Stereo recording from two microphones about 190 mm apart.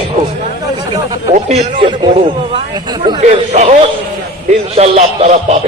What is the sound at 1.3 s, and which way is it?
A man's voice, 35° right (ahead or behind).